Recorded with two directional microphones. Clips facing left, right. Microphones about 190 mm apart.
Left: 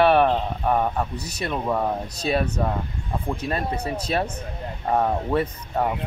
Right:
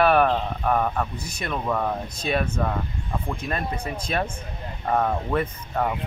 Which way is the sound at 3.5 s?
30° left (ahead or behind).